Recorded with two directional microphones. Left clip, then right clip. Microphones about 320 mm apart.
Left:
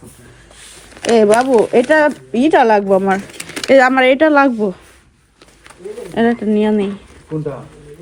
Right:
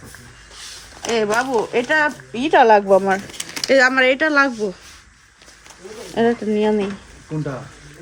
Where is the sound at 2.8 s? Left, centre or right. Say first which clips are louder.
Left 1 dB; left.